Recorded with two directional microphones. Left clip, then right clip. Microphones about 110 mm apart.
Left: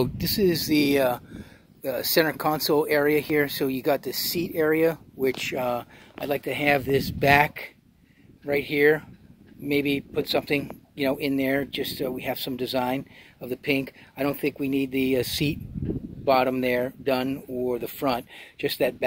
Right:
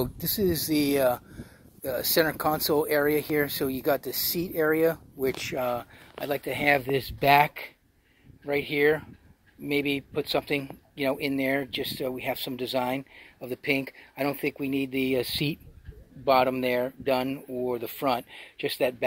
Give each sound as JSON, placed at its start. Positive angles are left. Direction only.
{"t": 0.0, "sound": "speech", "side_deg": 20}